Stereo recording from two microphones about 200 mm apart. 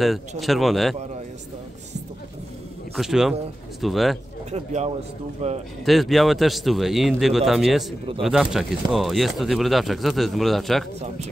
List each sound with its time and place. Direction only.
0.4 s speech: centre (ahead or behind)
3.0 s speech: centre (ahead or behind)
4.5 s speech: 35° right (ahead or behind)
5.9 s speech: centre (ahead or behind)